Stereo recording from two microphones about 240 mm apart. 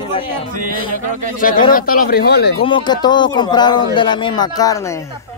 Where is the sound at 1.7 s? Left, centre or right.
Left.